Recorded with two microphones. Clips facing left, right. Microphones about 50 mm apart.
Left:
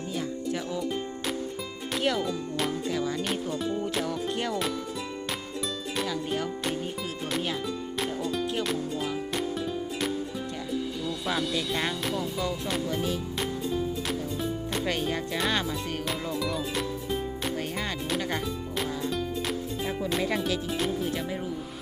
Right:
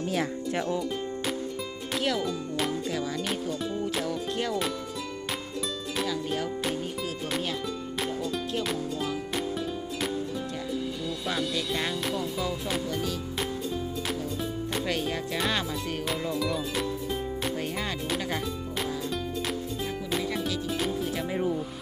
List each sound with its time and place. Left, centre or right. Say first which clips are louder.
2.0 s music: left 1 dB; centre
6.0 s music: even; centre
8.4 s music: left 1 dB; centre
11.3 s music: left 1 dB; centre
12.9 s speech: left 2 dB; left
13.4 s music: left 2 dB; centre
20.7 s music: left 1 dB; centre